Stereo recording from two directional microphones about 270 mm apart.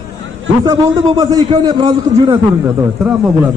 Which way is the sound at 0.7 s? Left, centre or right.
Centre.